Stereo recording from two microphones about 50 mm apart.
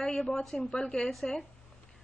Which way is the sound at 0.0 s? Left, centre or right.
Centre.